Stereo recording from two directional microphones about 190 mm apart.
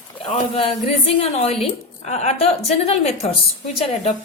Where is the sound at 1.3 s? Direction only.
30° left (ahead or behind).